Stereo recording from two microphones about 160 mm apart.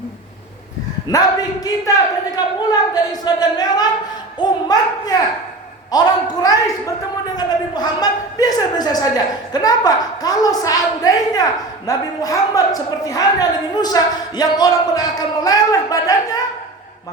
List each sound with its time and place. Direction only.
1.0 s a woman's voice: 25° left (ahead or behind)